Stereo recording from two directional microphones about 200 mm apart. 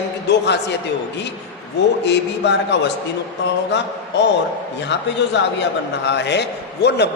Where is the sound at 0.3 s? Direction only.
60° left (ahead or behind).